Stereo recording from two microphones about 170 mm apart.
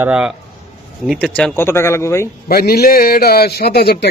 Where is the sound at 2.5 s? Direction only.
60° left (ahead or behind).